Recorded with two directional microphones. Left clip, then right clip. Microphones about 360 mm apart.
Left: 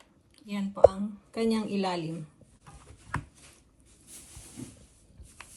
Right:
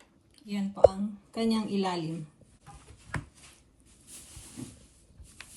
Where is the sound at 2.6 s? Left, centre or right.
Centre.